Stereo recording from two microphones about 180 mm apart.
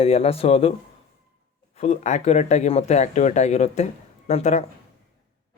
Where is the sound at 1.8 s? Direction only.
40° left (ahead or behind).